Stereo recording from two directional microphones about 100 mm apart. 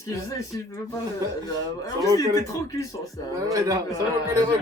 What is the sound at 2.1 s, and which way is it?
Speech, 35° left (ahead or behind).